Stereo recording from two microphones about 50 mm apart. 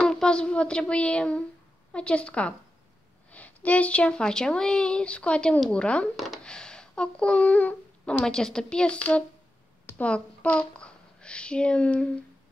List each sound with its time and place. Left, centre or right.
0.0 s a woman's voice: centre
3.3 s a sound: left
4.2 s a woman's voice: centre
6.1 s speech: centre
6.4 s a child's voice: centre